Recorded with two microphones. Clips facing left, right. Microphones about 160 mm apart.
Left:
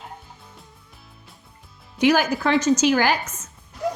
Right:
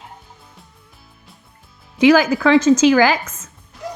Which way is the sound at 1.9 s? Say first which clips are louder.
Right 6 dB; 90° right.